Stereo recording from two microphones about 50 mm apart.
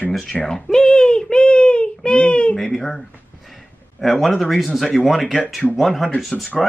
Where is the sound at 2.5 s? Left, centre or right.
Centre.